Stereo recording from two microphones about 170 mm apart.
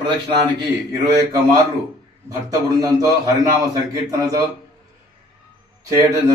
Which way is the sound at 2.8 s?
25° right (ahead or behind).